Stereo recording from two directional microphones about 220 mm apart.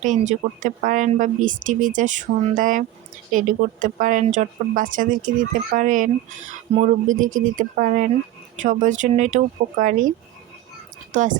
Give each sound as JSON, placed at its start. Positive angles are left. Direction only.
{"t": 0.0, "sound": "speech", "side_deg": -35}
{"t": 11.1, "sound": "a woman's voice", "side_deg": -35}